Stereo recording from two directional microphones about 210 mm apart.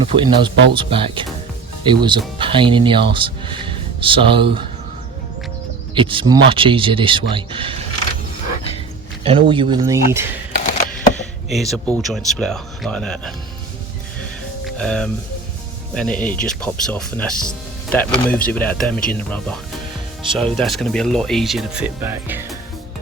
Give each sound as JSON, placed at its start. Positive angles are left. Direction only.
{"t": 0.1, "sound": "speech", "side_deg": -20}
{"t": 5.9, "sound": "speech", "side_deg": -25}
{"t": 9.2, "sound": "speech", "side_deg": -25}
{"t": 11.4, "sound": "speech", "side_deg": 0}
{"t": 14.6, "sound": "music", "side_deg": 5}
{"t": 16.0, "sound": "speech", "side_deg": 5}